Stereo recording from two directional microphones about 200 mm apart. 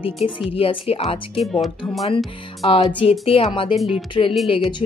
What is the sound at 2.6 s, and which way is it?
Speech, 30° left (ahead or behind).